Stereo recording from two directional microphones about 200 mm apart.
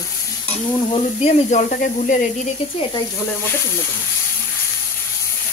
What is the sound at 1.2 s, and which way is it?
Speech, 35° left (ahead or behind).